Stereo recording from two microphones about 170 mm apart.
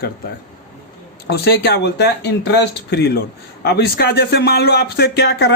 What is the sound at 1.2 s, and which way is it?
Speech, 70° left (ahead or behind).